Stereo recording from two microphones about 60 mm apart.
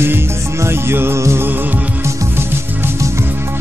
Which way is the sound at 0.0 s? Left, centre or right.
Right.